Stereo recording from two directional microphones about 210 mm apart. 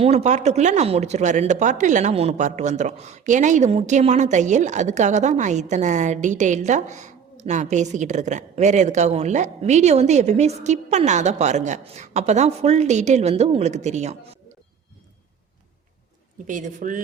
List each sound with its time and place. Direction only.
0.0 s speech: 30° right (ahead or behind)
16.5 s speech: 40° right (ahead or behind)